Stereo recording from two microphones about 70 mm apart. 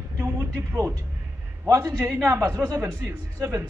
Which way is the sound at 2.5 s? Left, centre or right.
Right.